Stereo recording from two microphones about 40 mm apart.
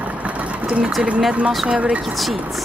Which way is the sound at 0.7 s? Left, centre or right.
Right.